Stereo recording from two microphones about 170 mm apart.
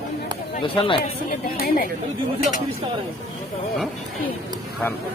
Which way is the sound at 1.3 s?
60° left (ahead or behind).